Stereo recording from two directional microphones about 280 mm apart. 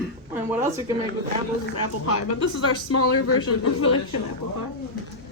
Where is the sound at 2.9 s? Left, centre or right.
Left.